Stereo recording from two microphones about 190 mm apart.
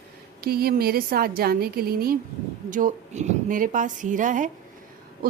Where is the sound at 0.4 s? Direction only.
55° right (ahead or behind).